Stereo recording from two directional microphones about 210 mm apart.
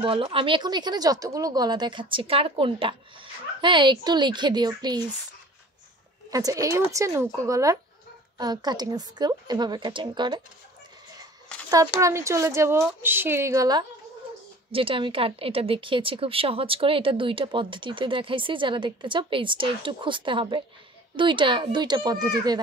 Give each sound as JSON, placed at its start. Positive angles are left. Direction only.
{"t": 0.0, "sound": "speech", "side_deg": -25}
{"t": 6.3, "sound": "a woman's voice", "side_deg": -15}
{"t": 12.0, "sound": "a woman's voice", "side_deg": -15}